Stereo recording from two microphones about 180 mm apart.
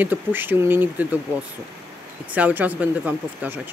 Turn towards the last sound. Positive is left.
turn(degrees=-10)  # may be behind; listen again after turning